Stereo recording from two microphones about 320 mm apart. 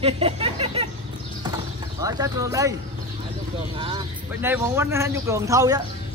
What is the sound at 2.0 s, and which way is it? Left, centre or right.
Speech, centre.